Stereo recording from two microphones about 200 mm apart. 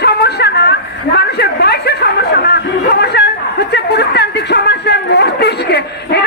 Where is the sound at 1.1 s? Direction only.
55° left (ahead or behind).